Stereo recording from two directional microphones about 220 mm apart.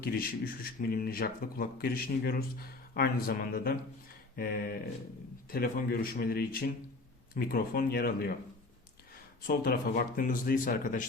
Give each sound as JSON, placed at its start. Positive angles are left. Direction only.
{"t": 0.0, "sound": "speech", "side_deg": 40}
{"t": 9.5, "sound": "speech", "side_deg": 40}